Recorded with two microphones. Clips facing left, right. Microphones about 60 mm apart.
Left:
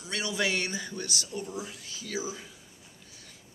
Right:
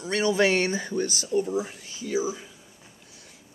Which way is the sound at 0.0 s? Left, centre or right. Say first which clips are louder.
Right 9 dB; right.